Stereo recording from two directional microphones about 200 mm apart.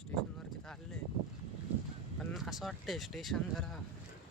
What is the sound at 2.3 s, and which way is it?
Speech, centre (ahead or behind).